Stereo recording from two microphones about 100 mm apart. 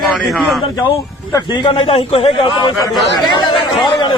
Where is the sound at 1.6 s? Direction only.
65° left (ahead or behind).